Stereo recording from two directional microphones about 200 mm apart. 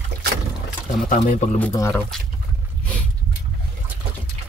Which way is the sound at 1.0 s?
40° left (ahead or behind).